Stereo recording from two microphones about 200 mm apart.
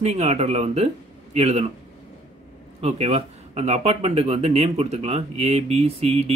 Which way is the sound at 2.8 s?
30° right (ahead or behind).